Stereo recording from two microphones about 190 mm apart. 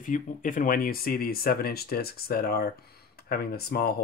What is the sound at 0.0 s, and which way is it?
Speech, 45° left (ahead or behind).